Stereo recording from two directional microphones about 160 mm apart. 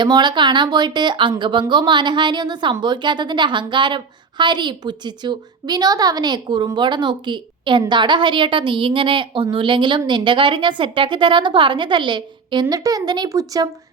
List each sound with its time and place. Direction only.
0.0 s a woman's voice: 30° right (ahead or behind)